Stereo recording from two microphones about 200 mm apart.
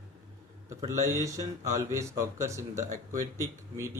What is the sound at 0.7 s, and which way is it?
Speech, 15° right (ahead or behind).